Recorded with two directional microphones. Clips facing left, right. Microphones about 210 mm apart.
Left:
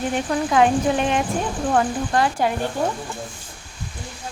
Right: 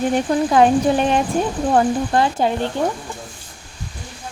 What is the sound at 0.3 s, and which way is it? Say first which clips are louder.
Speech: right 2 dB; 35° right (ahead or behind).